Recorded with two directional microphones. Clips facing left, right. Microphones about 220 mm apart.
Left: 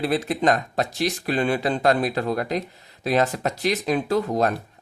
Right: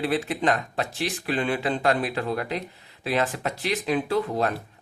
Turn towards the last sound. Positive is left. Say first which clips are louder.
# left 3 dB
turn(degrees=40)  # may be behind; listen again after turning